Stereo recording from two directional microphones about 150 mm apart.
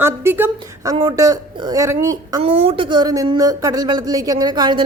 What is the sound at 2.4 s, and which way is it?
Speech, 35° right (ahead or behind).